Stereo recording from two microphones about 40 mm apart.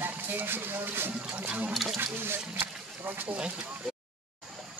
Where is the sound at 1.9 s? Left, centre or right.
Right.